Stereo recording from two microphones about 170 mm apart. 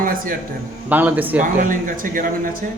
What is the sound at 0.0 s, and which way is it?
Speech, 55° right (ahead or behind).